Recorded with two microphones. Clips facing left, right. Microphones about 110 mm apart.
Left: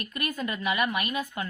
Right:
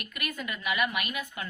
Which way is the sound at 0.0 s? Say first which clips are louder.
Left 5 dB; 35° left (ahead or behind).